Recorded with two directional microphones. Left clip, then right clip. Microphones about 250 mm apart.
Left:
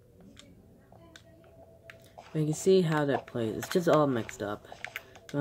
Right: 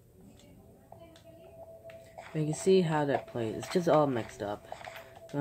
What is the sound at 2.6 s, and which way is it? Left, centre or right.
Speech, centre.